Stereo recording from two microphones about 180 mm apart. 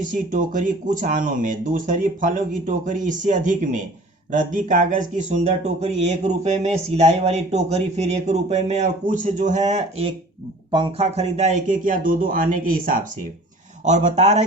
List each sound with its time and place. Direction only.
0.0 s speech: 45° right (ahead or behind)